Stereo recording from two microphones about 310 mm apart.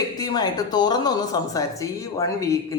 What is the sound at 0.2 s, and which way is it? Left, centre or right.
Speech, centre.